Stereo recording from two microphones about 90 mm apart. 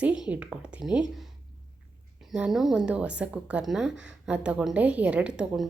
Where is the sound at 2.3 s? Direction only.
5° right (ahead or behind).